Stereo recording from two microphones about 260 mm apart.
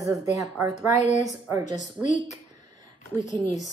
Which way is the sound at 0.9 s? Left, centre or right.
Left.